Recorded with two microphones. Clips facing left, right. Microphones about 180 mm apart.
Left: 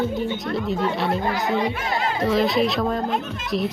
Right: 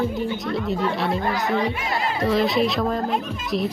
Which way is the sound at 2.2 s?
Centre (ahead or behind).